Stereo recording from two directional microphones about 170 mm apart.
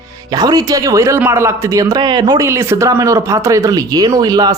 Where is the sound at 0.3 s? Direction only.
25° right (ahead or behind).